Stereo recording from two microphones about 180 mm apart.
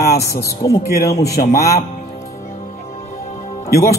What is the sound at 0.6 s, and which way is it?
Speech, 20° left (ahead or behind).